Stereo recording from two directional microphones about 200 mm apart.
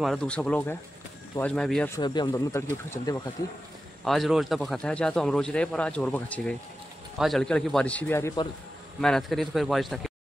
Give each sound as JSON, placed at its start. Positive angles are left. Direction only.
{"t": 0.0, "sound": "speech", "side_deg": 5}
{"t": 2.0, "sound": "speech", "side_deg": 20}
{"t": 4.0, "sound": "speech", "side_deg": 0}